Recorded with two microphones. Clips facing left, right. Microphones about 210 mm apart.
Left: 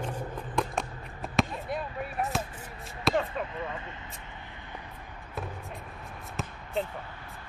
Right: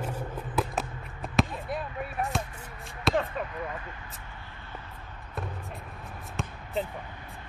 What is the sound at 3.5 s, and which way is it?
Vehicle, 25° left (ahead or behind).